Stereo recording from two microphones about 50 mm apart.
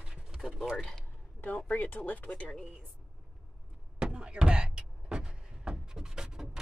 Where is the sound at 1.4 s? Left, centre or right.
Left.